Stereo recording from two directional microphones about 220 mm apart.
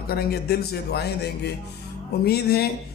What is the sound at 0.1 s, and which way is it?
A man's voice, 45° left (ahead or behind).